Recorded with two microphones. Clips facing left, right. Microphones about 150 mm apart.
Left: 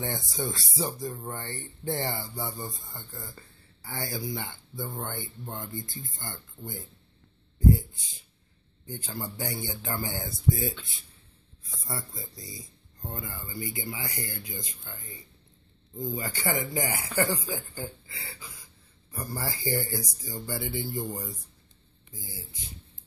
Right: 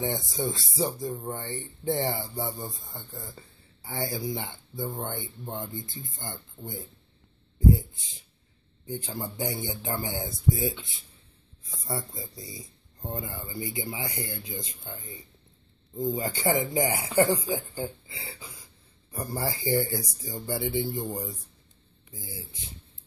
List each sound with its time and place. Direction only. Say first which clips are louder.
0.0 s speech: right 3 dB; 15° right (ahead or behind)
8.8 s speech: right 3 dB; 20° right (ahead or behind)
11.9 s speech: right 4 dB; 20° right (ahead or behind)
16.0 s speech: right 5 dB; 25° right (ahead or behind)